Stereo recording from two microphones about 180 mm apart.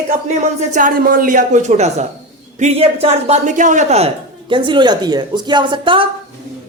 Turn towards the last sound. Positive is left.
turn(degrees=-25)  # may be behind; listen again after turning